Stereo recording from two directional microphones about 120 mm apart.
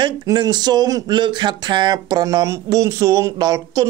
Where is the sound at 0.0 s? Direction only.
40° right (ahead or behind).